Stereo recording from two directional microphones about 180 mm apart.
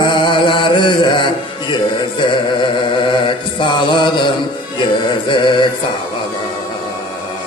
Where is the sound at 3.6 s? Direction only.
25° left (ahead or behind).